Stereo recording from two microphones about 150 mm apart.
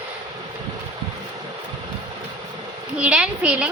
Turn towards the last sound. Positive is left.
turn(degrees=-10)  # may be behind; listen again after turning